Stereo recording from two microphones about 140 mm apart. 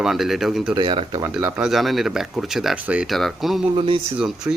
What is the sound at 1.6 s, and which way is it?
Speech, centre (ahead or behind).